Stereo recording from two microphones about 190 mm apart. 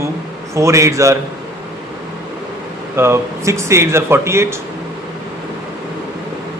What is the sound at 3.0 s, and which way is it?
Speech, 15° right (ahead or behind).